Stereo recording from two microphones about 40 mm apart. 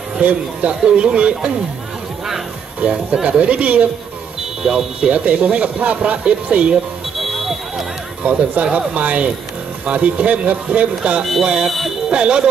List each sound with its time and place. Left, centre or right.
0.2 s speech: right
0.8 s speech: right
2.8 s speech: right
4.6 s speech: centre
5.1 s speech: right
7.2 s smoke detector: centre
8.2 s speech: right
11.6 s speech: centre
12.1 s speech: right